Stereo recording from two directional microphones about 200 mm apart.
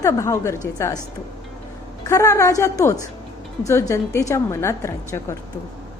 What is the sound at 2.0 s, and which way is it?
A woman's voice, 15° left (ahead or behind).